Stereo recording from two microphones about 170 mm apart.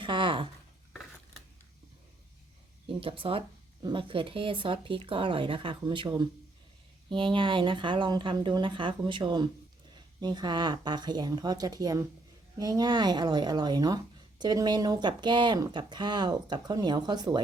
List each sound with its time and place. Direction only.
0.0 s speech: 30° right (ahead or behind)
3.0 s speech: 30° right (ahead or behind)